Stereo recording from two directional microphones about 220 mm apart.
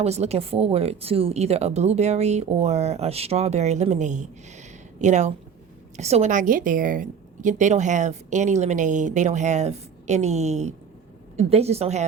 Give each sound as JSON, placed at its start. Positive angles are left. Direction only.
{"t": 0.0, "sound": "a woman's voice", "side_deg": -30}